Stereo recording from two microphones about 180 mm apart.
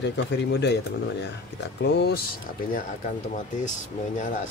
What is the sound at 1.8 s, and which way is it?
Speech, 65° left (ahead or behind).